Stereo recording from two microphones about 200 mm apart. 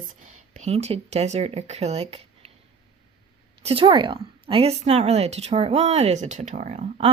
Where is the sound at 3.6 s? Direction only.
30° right (ahead or behind).